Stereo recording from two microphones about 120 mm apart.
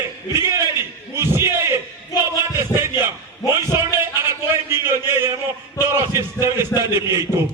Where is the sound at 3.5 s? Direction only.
20° right (ahead or behind).